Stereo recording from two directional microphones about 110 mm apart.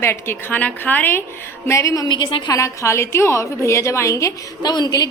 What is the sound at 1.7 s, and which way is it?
Speech, 30° left (ahead or behind).